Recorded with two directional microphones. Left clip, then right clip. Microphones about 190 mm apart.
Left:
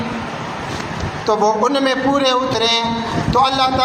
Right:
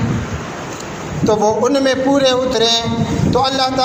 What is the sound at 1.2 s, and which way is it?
A man's voice, 35° right (ahead or behind).